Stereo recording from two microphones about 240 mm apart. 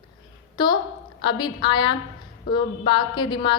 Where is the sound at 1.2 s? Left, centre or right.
Centre.